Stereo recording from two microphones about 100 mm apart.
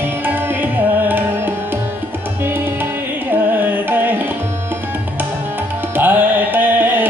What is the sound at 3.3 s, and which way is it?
Carnatic music, 20° right (ahead or behind).